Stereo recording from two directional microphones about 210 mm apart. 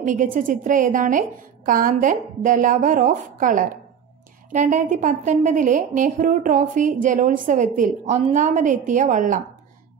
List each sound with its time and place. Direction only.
0.0 s a woman's voice: 40° right (ahead or behind)